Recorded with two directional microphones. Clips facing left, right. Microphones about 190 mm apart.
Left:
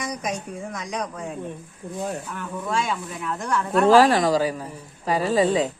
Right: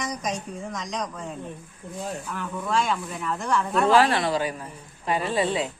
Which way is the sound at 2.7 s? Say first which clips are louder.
Right 1 dB; centre (ahead or behind).